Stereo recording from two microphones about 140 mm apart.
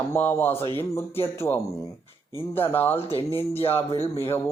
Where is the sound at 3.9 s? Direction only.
45° left (ahead or behind).